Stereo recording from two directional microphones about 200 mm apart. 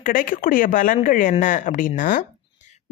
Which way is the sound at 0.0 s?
45° left (ahead or behind).